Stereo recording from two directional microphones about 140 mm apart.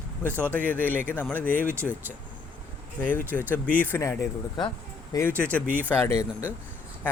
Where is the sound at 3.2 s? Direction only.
15° right (ahead or behind).